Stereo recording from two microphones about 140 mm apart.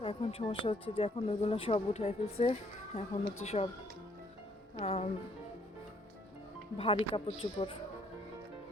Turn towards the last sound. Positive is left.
turn(degrees=40)  # may be behind; listen again after turning